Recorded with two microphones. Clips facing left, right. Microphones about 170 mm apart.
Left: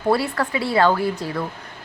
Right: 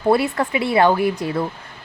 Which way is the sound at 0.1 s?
20° right (ahead or behind).